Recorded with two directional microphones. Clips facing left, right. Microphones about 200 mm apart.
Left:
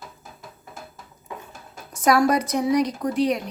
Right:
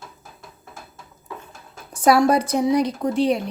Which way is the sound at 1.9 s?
30° right (ahead or behind).